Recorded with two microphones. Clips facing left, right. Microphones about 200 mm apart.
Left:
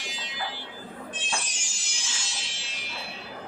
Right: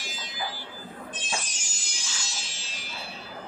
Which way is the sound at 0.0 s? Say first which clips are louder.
Left 1 dB; 40° right (ahead or behind).